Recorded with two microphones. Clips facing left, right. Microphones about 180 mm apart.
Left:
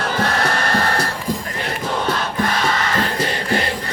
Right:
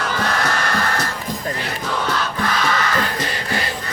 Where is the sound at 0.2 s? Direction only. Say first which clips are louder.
Left 3 dB; 35° left (ahead or behind).